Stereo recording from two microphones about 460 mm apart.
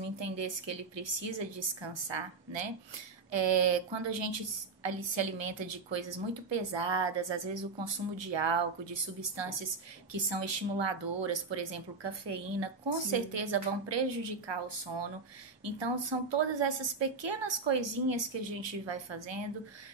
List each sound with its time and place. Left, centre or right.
0.2 s a woman's voice: right